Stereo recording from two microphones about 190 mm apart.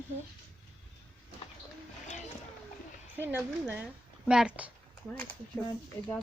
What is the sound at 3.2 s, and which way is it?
A woman's voice, 10° right (ahead or behind).